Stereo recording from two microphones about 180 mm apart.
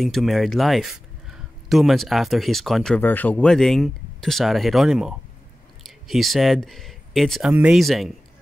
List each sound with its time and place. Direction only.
0.0 s speech: centre (ahead or behind)